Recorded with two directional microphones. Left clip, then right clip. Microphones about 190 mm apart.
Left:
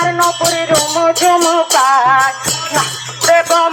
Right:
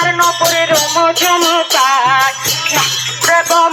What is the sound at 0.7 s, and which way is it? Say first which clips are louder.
Music: right 1 dB; 55° left (ahead or behind).